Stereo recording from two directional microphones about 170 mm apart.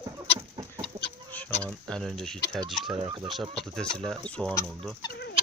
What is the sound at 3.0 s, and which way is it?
Speech, 25° right (ahead or behind).